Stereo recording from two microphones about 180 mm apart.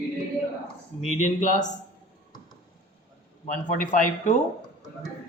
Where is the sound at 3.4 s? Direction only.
45° left (ahead or behind).